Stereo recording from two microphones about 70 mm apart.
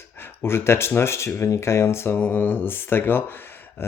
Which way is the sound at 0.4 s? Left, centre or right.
Left.